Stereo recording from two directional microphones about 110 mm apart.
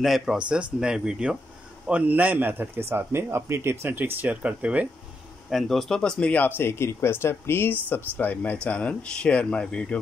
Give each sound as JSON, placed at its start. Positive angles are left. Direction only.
{"t": 0.0, "sound": "a man's voice", "side_deg": 0}
{"t": 5.5, "sound": "speech", "side_deg": 0}